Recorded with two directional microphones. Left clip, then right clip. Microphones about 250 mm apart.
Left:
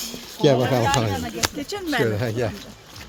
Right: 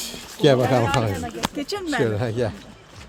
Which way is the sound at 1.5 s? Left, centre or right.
Right.